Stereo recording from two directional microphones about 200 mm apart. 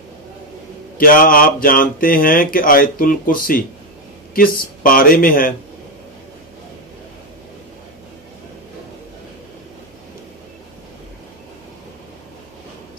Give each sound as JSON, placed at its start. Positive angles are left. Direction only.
{"t": 0.9, "sound": "speech", "side_deg": 45}